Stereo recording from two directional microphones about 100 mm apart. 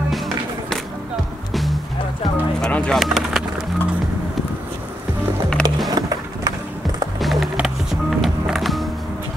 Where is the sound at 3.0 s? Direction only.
Centre (ahead or behind).